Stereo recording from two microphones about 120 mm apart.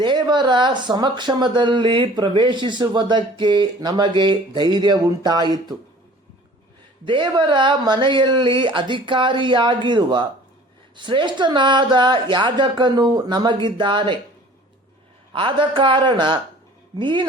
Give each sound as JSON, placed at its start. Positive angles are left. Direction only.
{"t": 0.0, "sound": "speech", "side_deg": -40}
{"t": 7.0, "sound": "speech", "side_deg": -40}
{"t": 15.3, "sound": "speech", "side_deg": -45}